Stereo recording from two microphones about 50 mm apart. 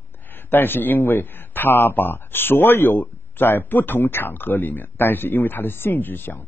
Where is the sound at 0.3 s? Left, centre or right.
Left.